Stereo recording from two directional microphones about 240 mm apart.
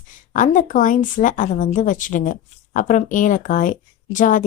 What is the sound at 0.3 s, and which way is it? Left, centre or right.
A woman's voice, left.